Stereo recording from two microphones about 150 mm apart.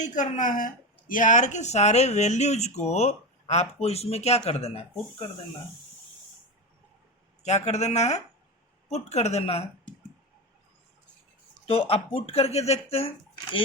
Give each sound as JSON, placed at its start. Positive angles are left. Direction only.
{"t": 0.0, "sound": "speech", "side_deg": 55}
{"t": 7.4, "sound": "speech", "side_deg": 50}
{"t": 11.6, "sound": "speech", "side_deg": 40}